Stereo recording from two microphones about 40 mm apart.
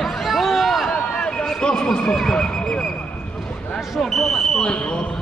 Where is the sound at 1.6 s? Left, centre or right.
Left.